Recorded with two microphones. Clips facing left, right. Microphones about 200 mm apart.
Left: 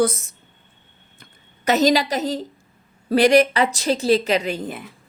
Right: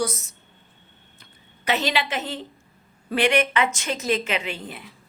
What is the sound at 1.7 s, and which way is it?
Speech, 40° left (ahead or behind).